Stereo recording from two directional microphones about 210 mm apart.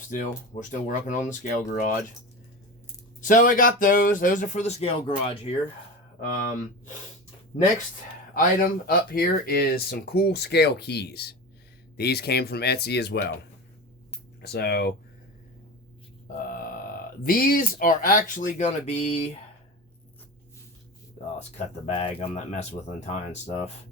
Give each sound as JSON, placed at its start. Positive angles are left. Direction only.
{"t": 0.1, "sound": "speech", "side_deg": 35}
{"t": 3.2, "sound": "speech", "side_deg": 40}
{"t": 8.4, "sound": "speech", "side_deg": 45}
{"t": 14.4, "sound": "speech", "side_deg": 50}
{"t": 17.2, "sound": "speech", "side_deg": 45}
{"t": 21.9, "sound": "speech", "side_deg": 25}